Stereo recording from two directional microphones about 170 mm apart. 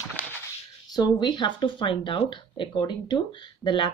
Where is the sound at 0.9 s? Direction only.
25° left (ahead or behind).